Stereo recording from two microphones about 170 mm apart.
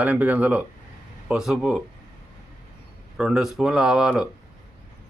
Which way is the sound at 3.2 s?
5° right (ahead or behind).